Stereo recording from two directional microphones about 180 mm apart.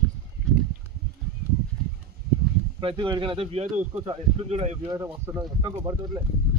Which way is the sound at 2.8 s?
25° right (ahead or behind).